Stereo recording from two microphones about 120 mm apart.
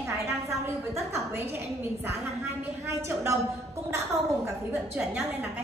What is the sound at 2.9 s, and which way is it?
Speech, 25° right (ahead or behind).